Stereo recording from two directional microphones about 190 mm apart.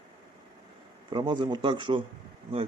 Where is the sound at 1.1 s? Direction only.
25° right (ahead or behind).